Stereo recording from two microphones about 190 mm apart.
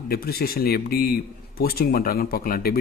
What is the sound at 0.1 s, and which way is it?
A man's voice, 55° left (ahead or behind).